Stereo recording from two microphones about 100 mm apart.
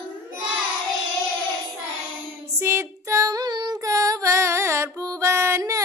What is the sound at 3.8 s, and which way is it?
Music, 35° right (ahead or behind).